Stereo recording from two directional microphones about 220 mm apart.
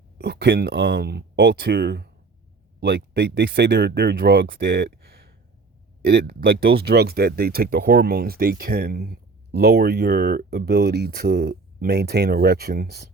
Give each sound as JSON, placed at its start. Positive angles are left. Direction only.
{"t": 0.2, "sound": "speech", "side_deg": -45}